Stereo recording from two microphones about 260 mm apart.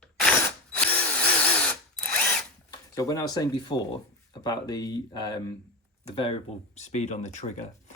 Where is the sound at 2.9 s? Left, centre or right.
Centre.